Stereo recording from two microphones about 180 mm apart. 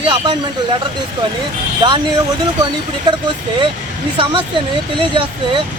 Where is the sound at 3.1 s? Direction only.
25° right (ahead or behind).